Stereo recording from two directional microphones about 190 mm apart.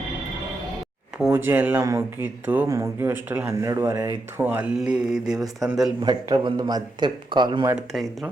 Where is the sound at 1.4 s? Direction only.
10° right (ahead or behind).